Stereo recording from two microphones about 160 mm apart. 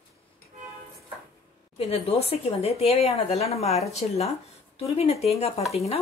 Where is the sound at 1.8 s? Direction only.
40° left (ahead or behind).